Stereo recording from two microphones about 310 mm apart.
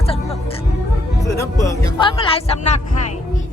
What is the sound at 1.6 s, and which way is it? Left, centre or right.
Speech, centre.